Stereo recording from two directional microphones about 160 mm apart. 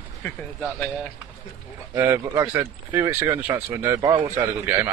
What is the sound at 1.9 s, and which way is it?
Speech, 15° right (ahead or behind).